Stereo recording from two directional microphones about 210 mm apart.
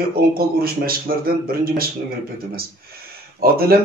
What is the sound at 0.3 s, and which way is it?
Speech, 45° right (ahead or behind).